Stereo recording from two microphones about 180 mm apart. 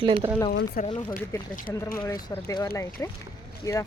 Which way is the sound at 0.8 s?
50° left (ahead or behind).